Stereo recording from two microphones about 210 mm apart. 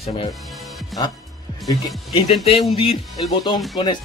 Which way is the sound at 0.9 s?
Centre (ahead or behind).